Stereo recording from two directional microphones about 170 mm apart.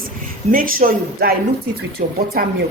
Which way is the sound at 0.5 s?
55° right (ahead or behind).